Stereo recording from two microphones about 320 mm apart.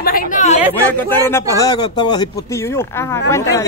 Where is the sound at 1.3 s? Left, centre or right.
Centre.